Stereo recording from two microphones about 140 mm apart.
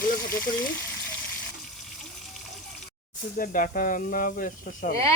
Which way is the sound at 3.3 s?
80° left.